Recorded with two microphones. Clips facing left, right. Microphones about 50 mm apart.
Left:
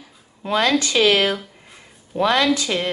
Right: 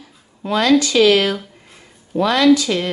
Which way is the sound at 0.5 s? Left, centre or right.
Left.